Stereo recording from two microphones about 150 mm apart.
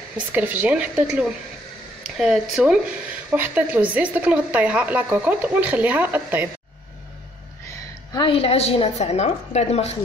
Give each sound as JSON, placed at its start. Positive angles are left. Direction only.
{"t": 0.3, "sound": "speech", "side_deg": -10}
{"t": 8.1, "sound": "a woman's voice", "side_deg": 35}